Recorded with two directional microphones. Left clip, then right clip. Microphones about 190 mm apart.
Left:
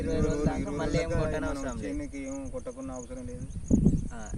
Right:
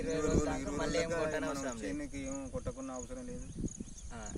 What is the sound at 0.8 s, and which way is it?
Speech, 15° right (ahead or behind).